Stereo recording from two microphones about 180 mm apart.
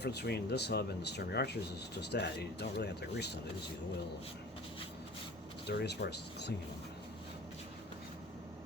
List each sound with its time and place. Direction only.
0.0 s speech: 65° left (ahead or behind)
5.6 s speech: 65° left (ahead or behind)